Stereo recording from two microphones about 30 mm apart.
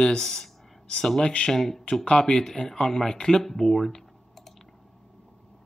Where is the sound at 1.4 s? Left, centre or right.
Centre.